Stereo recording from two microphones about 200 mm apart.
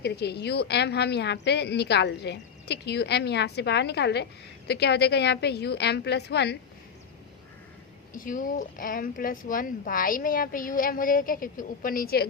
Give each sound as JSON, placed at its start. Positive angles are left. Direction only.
{"t": 0.0, "sound": "a woman's voice", "side_deg": 55}
{"t": 8.1, "sound": "speech", "side_deg": 45}